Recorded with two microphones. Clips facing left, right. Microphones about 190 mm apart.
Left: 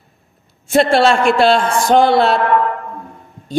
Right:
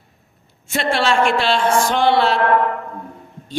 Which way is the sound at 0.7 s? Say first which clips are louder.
Left 7 dB; 40° left (ahead or behind).